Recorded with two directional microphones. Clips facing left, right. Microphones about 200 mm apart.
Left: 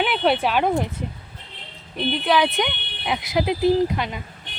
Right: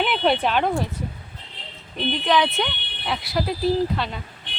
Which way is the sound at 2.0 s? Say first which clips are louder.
Left 1 dB; 10° left (ahead or behind).